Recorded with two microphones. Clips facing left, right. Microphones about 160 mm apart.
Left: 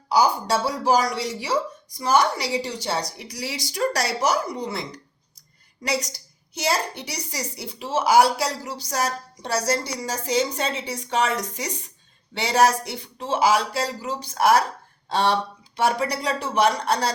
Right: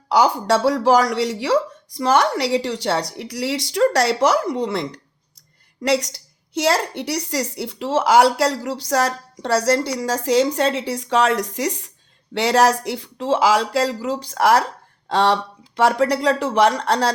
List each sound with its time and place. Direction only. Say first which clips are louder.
0.1 s a woman's voice: right 4 dB; 90° right; by 4.2 s 70° right (ahead or behind)
4.3 s a woman's voice: right 5 dB; 90° right
6.6 s a woman's voice: right 6 dB; 90° right